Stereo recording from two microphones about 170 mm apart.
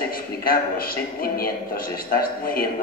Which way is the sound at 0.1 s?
60° left (ahead or behind).